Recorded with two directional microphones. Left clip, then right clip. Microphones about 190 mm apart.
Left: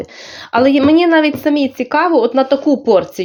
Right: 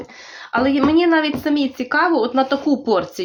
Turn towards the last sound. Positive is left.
turn(degrees=25)  # may be behind; listen again after turning